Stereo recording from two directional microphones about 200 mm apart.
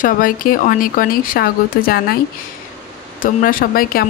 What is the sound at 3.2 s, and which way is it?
Speech, 45° left (ahead or behind).